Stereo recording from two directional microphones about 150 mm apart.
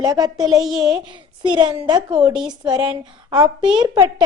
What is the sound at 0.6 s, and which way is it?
Speech, centre (ahead or behind).